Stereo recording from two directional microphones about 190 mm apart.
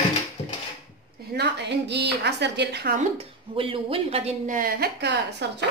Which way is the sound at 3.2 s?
30° right (ahead or behind).